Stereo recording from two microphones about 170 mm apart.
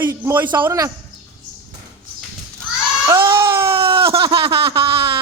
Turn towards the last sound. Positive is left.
turn(degrees=-30)  # may be behind; listen again after turning